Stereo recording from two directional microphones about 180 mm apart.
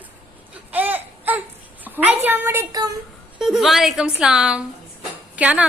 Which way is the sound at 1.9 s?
10° right (ahead or behind).